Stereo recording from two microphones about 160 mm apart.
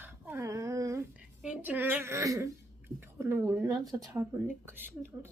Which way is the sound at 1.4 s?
5° right (ahead or behind).